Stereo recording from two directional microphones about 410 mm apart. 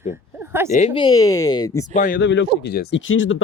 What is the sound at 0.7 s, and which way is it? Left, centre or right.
Speech, centre.